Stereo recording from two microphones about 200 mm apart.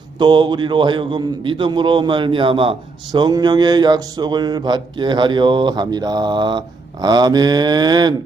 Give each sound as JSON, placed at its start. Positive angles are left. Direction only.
{"t": 0.2, "sound": "a man's voice", "side_deg": -25}